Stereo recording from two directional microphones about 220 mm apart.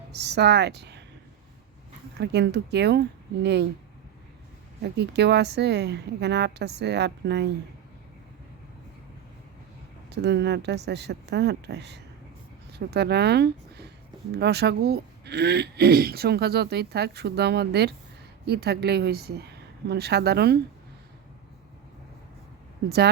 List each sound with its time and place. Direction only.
0.1 s speech: 50° right (ahead or behind)
2.1 s speech: 50° right (ahead or behind)
4.8 s speech: 50° right (ahead or behind)
10.1 s speech: 50° right (ahead or behind)